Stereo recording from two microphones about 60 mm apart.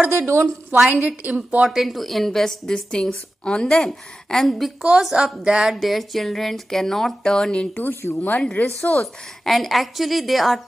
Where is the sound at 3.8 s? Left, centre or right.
Centre.